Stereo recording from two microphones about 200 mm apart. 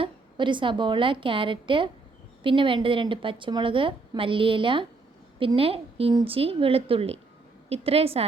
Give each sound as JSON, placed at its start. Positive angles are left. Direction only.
{"t": 0.0, "sound": "a woman's voice", "side_deg": -25}